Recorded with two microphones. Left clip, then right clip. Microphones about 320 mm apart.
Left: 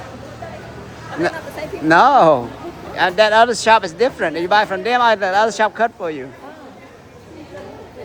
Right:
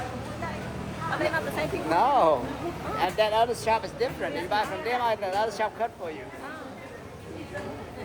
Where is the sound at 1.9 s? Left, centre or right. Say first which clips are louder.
Left 12 dB; left.